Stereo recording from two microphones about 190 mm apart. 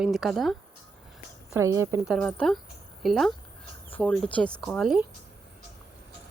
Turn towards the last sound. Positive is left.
turn(degrees=0)  # may be behind; listen again after turning